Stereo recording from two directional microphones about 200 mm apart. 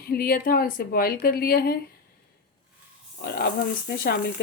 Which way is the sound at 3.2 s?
50° left (ahead or behind).